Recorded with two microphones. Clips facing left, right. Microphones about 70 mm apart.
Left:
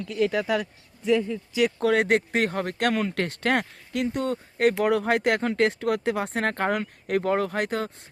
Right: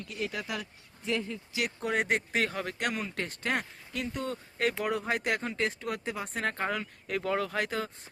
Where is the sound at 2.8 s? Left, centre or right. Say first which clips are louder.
Left 10 dB; left.